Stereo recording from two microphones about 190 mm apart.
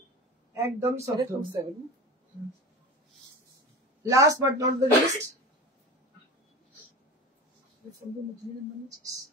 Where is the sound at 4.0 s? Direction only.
15° right (ahead or behind).